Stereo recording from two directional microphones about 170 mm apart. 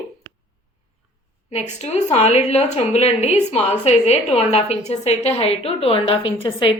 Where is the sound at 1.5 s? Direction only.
40° left (ahead or behind).